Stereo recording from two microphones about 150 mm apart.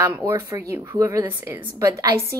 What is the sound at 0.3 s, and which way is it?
A woman's voice, 20° right (ahead or behind).